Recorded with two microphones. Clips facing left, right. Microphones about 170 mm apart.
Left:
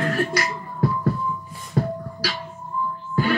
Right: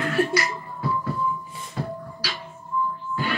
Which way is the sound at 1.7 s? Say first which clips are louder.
Left 7 dB; 50° left (ahead or behind).